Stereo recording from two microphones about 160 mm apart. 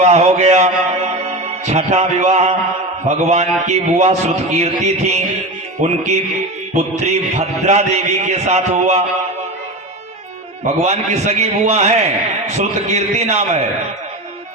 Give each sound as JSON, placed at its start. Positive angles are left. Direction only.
{"t": 0.0, "sound": "a man's voice", "side_deg": -45}
{"t": 10.8, "sound": "a man's voice", "side_deg": -40}